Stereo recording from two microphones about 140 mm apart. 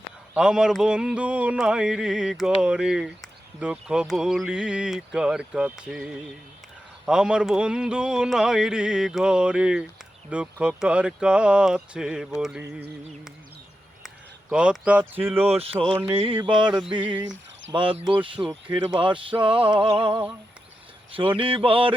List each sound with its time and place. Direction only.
0.3 s speech: 5° right (ahead or behind)
14.5 s speech: 5° right (ahead or behind)
15.5 s speech: 45° right (ahead or behind)
17.2 s cricket: 35° right (ahead or behind)
18.1 s speech: 35° right (ahead or behind)
21.3 s speech: 40° right (ahead or behind)